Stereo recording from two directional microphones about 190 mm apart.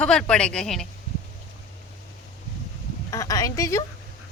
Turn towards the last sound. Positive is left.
turn(degrees=15)  # may be behind; listen again after turning